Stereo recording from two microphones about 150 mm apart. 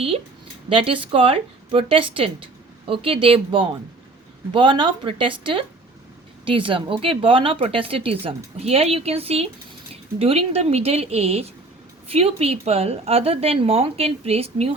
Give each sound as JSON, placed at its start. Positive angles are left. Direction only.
{"t": 0.7, "sound": "speech", "side_deg": -35}